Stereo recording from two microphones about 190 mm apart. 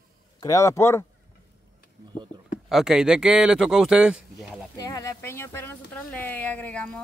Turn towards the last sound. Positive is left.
turn(degrees=5)  # may be behind; listen again after turning